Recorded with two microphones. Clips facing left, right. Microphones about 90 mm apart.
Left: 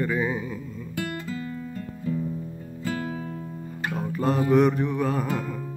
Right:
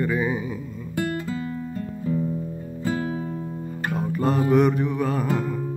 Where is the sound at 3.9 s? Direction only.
Centre (ahead or behind).